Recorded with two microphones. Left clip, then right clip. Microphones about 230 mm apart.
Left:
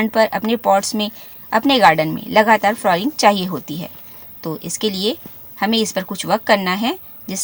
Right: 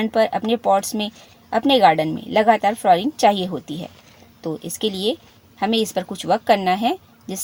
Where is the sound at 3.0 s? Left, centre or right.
Left.